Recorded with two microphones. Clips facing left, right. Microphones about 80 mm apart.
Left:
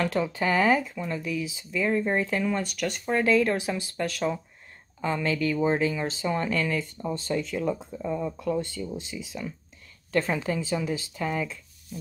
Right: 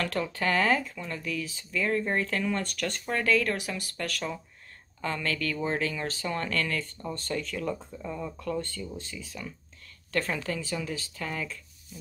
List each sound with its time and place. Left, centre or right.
0.0 s a woman's voice: centre